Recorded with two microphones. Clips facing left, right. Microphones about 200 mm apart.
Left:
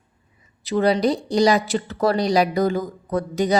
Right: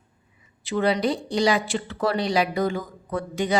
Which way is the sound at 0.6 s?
40° left (ahead or behind).